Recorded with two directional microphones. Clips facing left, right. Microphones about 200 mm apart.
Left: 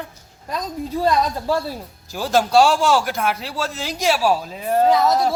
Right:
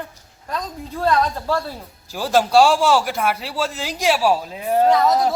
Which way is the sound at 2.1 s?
10° right (ahead or behind).